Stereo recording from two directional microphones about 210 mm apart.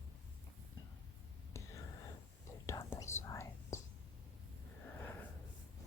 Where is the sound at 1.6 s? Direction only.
15° left (ahead or behind).